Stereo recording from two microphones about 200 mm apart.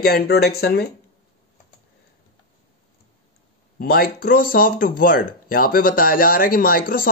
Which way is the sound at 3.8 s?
50° left (ahead or behind).